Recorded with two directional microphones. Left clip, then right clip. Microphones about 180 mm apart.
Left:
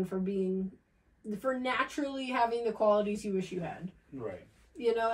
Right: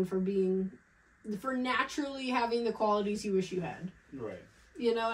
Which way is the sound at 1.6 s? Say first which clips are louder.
Even; 15° right (ahead or behind).